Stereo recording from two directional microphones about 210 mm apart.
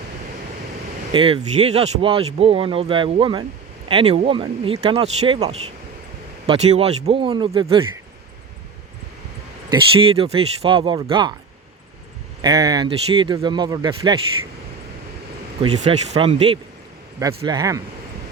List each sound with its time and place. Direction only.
1.1 s speech: 25° right (ahead or behind)
9.6 s speech: 25° right (ahead or behind)
12.4 s speech: 15° right (ahead or behind)
15.8 s speech: 30° right (ahead or behind)